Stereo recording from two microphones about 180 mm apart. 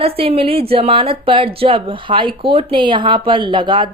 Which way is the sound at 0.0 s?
30° right (ahead or behind).